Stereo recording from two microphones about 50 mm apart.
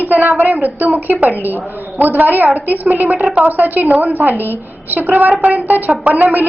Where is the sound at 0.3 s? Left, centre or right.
Right.